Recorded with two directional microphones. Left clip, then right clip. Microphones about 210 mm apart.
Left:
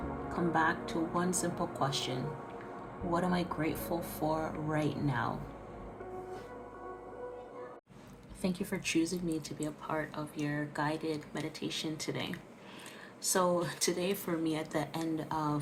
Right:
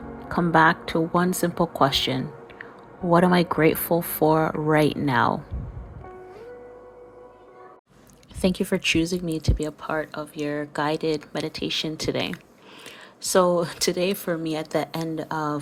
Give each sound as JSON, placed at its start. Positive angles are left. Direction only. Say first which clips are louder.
{"t": 0.3, "sound": "speech", "louder": "right 13 dB", "side_deg": -45}
{"t": 8.4, "sound": "speech", "louder": "right 13 dB", "side_deg": -40}